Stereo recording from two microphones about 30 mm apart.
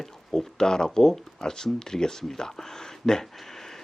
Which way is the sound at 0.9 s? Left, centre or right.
Centre.